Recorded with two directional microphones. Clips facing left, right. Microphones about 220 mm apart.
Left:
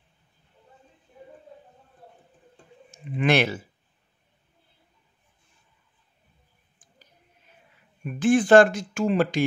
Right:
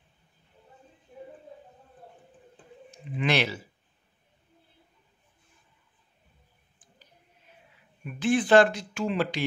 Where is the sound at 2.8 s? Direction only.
50° left (ahead or behind).